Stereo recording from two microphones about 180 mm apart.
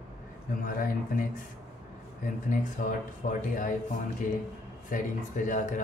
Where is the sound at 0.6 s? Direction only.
50° left (ahead or behind).